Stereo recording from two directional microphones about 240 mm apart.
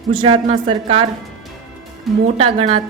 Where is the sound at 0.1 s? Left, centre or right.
Right.